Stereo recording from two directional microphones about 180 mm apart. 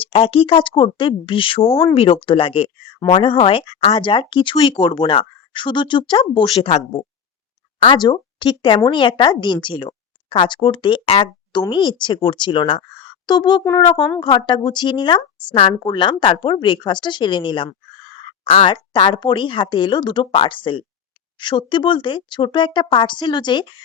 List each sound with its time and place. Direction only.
0.0 s speech: 30° left (ahead or behind)
7.8 s speech: 25° left (ahead or behind)